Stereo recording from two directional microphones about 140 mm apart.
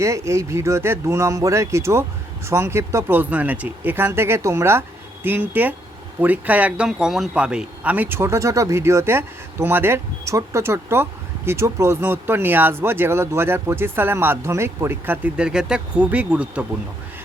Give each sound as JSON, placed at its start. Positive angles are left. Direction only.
{"t": 0.0, "sound": "a man's voice", "side_deg": -20}